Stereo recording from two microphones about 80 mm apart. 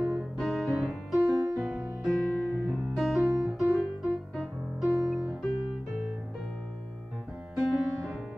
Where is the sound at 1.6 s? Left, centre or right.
Centre.